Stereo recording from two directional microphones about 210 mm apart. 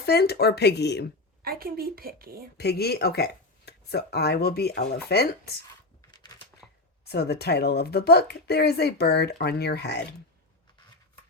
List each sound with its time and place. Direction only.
0.0 s speech: 50° left (ahead or behind)
1.4 s a woman's voice: 45° right (ahead or behind)
2.6 s speech: 50° left (ahead or behind)
6.6 s a sound: centre (ahead or behind)
7.0 s speech: 50° left (ahead or behind)